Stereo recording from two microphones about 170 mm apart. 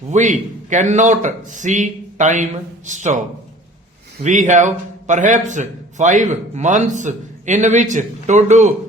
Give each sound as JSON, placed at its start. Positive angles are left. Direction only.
{"t": 0.1, "sound": "a man's voice", "side_deg": -45}